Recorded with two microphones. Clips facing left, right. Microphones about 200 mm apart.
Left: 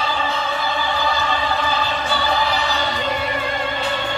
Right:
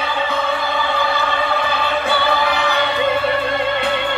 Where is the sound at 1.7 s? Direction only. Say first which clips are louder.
Right 3 dB; 60° right (ahead or behind).